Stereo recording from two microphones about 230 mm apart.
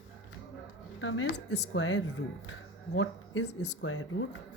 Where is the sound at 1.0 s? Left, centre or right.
Left.